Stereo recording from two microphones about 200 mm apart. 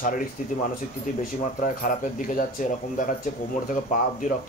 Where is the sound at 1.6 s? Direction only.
40° left (ahead or behind).